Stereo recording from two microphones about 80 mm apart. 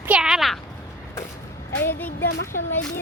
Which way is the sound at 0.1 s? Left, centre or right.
Centre.